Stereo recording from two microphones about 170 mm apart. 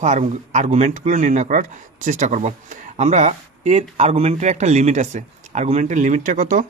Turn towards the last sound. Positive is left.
turn(degrees=-55)  # may be behind; listen again after turning